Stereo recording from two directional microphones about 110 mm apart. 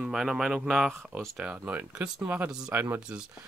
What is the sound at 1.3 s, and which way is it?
Speech, 15° right (ahead or behind).